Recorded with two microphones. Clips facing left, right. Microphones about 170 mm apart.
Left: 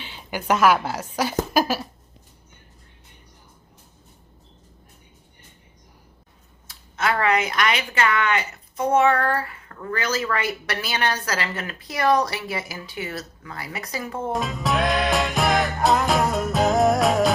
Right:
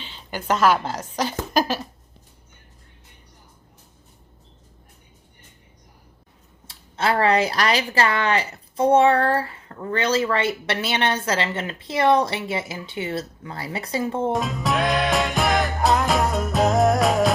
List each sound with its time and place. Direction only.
0.0 s a woman's voice: 15° left (ahead or behind)
6.7 s speech: 30° right (ahead or behind)
14.3 s music: centre (ahead or behind)